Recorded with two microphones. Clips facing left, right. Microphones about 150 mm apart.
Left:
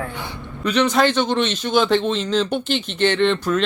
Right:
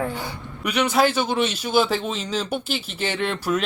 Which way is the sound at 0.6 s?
10° right (ahead or behind).